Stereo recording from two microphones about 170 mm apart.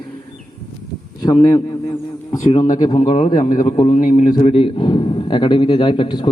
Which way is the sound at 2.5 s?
45° left (ahead or behind).